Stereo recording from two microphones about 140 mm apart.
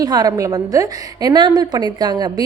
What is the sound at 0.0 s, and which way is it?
A woman's voice, 25° right (ahead or behind).